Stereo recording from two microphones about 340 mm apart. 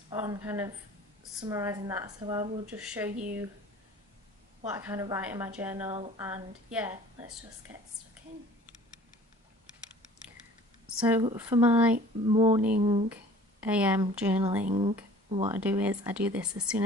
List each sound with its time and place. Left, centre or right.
0.1 s a woman's voice: centre
4.6 s a woman's voice: centre
11.0 s a woman's voice: centre
11.9 s a woman's voice: centre
13.6 s a woman's voice: centre
14.6 s speech: centre
15.5 s a woman's voice: centre